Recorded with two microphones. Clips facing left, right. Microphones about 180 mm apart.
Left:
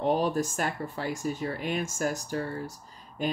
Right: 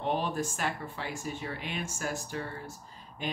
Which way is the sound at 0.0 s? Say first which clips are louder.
Left 5 dB; 40° left (ahead or behind).